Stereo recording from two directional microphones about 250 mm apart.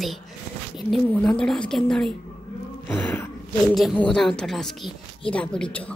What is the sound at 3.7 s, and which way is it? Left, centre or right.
Speech, centre.